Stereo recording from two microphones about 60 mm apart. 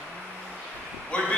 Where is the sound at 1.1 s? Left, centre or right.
Centre.